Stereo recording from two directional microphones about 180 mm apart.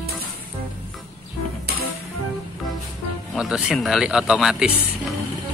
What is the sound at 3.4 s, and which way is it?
Speech, 5° right (ahead or behind).